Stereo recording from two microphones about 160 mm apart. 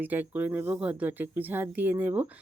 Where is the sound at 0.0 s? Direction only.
10° right (ahead or behind).